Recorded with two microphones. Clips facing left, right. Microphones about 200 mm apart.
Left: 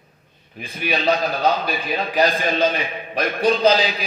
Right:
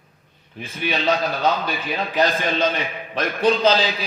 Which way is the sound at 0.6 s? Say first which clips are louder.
Left 1 dB; 35° left (ahead or behind).